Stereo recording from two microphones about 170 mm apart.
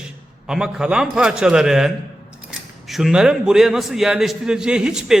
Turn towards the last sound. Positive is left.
turn(degrees=-5)  # may be behind; listen again after turning